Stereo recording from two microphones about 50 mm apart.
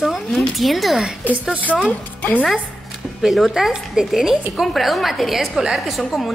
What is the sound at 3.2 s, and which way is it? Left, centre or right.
A woman's voice, centre.